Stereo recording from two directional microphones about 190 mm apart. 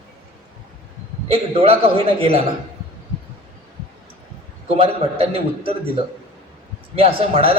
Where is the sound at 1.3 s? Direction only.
30° right (ahead or behind).